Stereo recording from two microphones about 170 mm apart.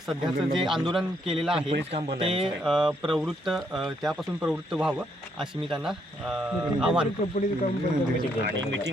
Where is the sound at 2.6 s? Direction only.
5° right (ahead or behind).